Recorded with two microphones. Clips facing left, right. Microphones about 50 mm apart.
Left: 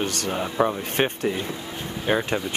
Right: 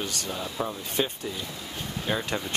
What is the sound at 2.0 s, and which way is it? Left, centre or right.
Speech, left.